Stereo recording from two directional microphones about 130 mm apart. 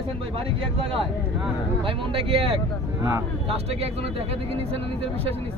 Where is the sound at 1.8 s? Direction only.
45° right (ahead or behind).